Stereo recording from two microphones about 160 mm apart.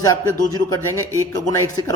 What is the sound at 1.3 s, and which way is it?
Speech, 25° left (ahead or behind).